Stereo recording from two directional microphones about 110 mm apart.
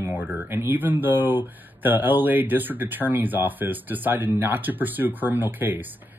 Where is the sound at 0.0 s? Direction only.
20° right (ahead or behind).